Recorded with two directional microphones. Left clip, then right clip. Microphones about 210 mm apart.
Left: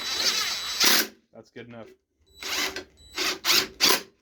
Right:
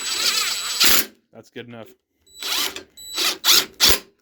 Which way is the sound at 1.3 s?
50° right (ahead or behind).